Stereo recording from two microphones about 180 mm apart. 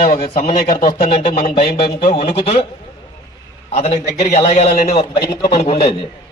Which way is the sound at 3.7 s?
35° left (ahead or behind).